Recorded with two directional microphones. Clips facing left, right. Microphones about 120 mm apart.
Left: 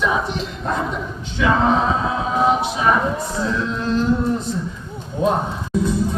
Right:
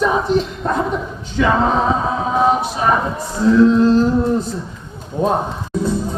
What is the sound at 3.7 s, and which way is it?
Speech, 35° right (ahead or behind).